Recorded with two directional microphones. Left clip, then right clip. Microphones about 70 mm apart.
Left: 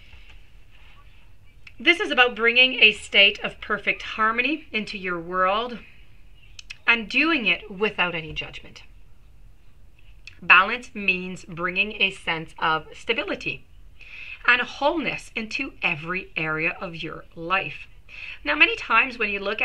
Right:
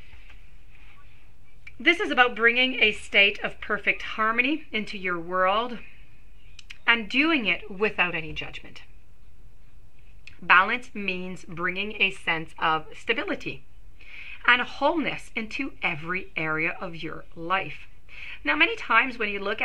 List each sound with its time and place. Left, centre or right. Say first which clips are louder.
1.6 s a woman's voice: left 2 dB; right
10.2 s a woman's voice: left 3 dB; right